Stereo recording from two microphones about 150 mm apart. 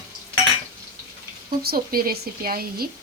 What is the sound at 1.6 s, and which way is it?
Speech, 85° right.